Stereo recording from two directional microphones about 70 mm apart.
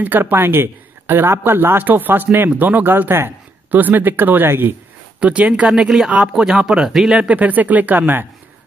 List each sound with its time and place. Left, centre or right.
0.0 s speech: right
5.2 s speech: centre
7.2 s speech: right